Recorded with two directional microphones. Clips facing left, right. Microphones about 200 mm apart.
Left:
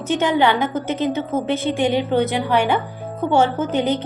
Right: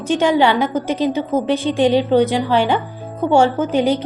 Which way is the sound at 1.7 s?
15° left (ahead or behind).